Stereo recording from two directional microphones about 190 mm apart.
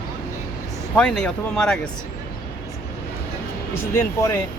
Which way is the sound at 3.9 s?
15° left (ahead or behind).